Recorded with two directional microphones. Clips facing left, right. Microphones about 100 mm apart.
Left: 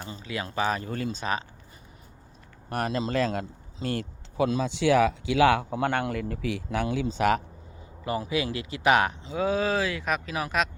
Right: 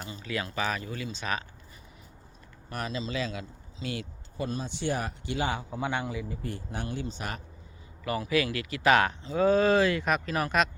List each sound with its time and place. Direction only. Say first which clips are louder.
0.0 s a sound: even; 25° left (ahead or behind)
0.4 s speech: left 7 dB; 30° left (ahead or behind)
0.9 s speech: left 5 dB; 45° left (ahead or behind)
2.6 s a man's voice: left 6 dB; 55° left (ahead or behind)
4.4 s speech: left 8 dB; 90° left
8.0 s speech: even; 25° left (ahead or behind)
9.3 s speech: right 4 dB; 5° left (ahead or behind)